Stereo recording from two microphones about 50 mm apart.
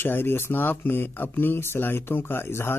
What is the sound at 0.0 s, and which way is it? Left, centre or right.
Speech, left.